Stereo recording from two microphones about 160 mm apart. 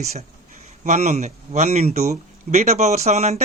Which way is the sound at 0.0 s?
45° right (ahead or behind).